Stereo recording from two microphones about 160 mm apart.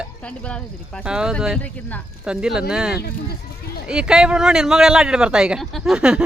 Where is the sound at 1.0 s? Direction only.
5° right (ahead or behind).